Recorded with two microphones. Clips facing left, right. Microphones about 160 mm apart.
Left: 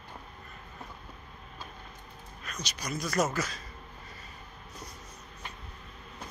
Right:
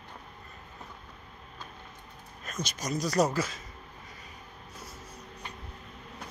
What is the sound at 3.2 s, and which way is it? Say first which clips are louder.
Speech: right 3 dB; 30° right (ahead or behind).